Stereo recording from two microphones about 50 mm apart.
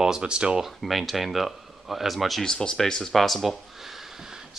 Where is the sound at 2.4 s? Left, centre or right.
Centre.